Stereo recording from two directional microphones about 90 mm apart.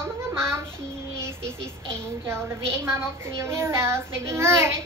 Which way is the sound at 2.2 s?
30° right (ahead or behind).